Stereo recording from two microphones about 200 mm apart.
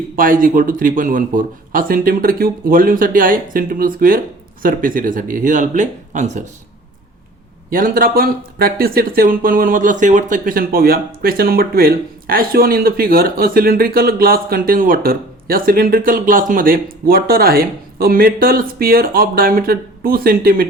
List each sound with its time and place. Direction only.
0.2 s speech: 45° right (ahead or behind)
7.7 s speech: 45° right (ahead or behind)